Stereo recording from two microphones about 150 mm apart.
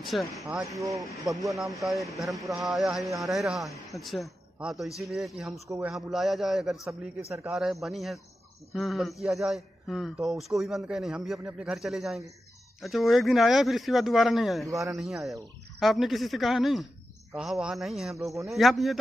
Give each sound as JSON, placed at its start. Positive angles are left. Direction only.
{"t": 0.0, "sound": "speech", "side_deg": 0}
{"t": 0.7, "sound": "speech", "side_deg": -20}
{"t": 1.5, "sound": "a man's voice", "side_deg": 0}